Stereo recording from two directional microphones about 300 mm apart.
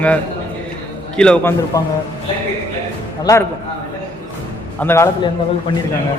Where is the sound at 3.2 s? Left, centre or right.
Centre.